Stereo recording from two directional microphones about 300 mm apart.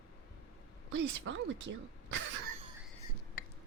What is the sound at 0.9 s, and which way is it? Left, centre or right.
A woman's voice, right.